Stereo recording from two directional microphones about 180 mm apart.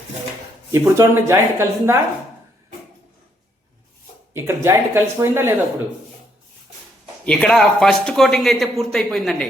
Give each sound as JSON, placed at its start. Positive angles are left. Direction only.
{"t": 0.7, "sound": "speech", "side_deg": -15}
{"t": 4.4, "sound": "speech", "side_deg": -15}
{"t": 7.3, "sound": "speech", "side_deg": 5}